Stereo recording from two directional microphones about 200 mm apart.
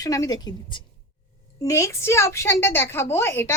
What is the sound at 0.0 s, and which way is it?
A woman's voice, 15° left (ahead or behind).